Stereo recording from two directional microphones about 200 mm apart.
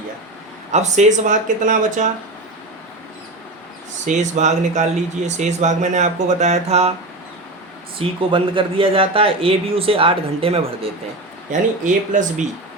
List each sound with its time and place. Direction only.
0.7 s speech: 35° right (ahead or behind)
4.0 s speech: 35° right (ahead or behind)
7.9 s a man's voice: 25° right (ahead or behind)
11.5 s speech: 40° right (ahead or behind)